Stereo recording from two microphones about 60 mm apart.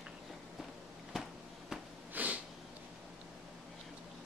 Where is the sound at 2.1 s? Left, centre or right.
Right.